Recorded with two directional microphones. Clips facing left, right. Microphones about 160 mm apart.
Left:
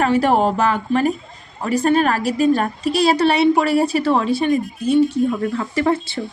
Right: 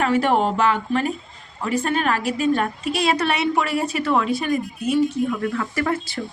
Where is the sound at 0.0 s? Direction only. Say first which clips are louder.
Left 3 dB; 40° left (ahead or behind).